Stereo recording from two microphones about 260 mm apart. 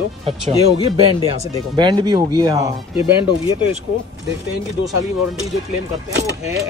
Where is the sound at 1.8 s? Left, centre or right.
Centre.